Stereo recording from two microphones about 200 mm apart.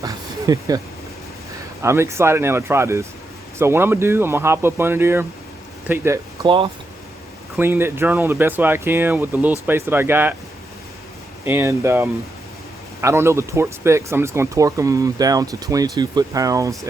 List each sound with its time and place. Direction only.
0.0 s speech: 15° right (ahead or behind)
1.8 s speech: 15° right (ahead or behind)
6.4 s speech: 25° right (ahead or behind)
7.6 s speech: 10° right (ahead or behind)
11.4 s speech: 15° right (ahead or behind)